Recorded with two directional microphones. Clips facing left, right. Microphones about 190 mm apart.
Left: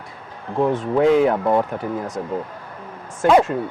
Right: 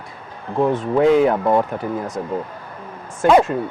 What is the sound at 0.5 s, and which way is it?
Speech, 35° right (ahead or behind).